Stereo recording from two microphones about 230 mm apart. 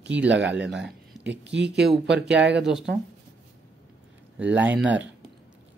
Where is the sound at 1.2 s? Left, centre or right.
Right.